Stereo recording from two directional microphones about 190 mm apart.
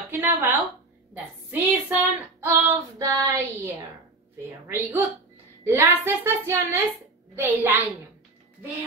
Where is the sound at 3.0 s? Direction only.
15° right (ahead or behind).